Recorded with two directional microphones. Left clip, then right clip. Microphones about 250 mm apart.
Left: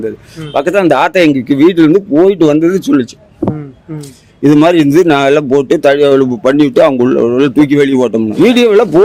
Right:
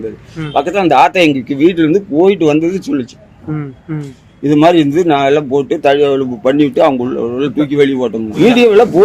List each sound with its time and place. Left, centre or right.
0.5 s speech: left
4.4 s a man's voice: left